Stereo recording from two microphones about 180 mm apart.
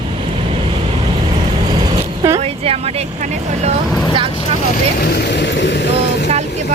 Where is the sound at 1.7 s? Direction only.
25° right (ahead or behind).